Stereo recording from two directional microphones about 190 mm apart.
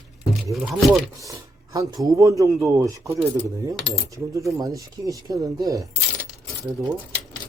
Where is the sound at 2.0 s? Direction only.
15° right (ahead or behind).